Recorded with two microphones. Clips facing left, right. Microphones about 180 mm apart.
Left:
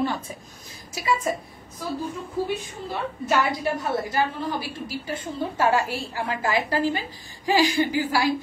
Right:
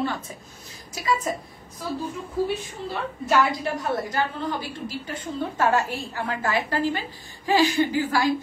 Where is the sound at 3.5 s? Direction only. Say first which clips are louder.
Left 1 dB; 45° right (ahead or behind).